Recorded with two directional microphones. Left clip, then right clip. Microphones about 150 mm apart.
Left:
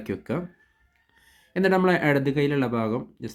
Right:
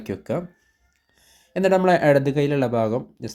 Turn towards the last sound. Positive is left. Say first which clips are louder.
# right 5 dB
turn(degrees=-10)  # may be behind; listen again after turning